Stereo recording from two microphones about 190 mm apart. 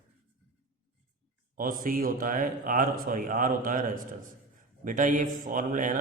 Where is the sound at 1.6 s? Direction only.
45° right (ahead or behind).